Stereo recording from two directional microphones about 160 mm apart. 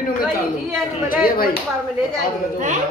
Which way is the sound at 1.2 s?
65° left (ahead or behind).